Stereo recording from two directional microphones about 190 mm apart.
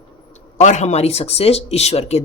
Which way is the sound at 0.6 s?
40° left (ahead or behind).